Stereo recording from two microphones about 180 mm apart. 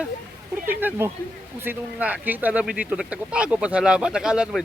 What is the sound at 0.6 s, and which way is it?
Speech, 10° right (ahead or behind).